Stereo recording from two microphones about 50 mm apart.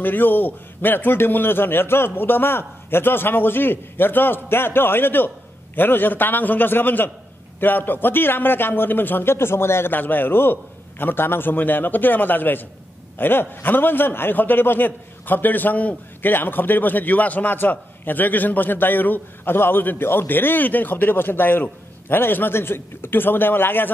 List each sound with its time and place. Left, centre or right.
0.0 s a man's voice: left
9.9 s a man's voice: left